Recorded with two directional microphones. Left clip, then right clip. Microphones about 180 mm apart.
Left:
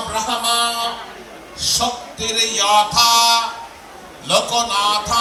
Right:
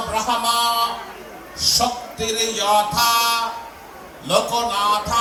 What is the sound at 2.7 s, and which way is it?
Music, 10° left (ahead or behind).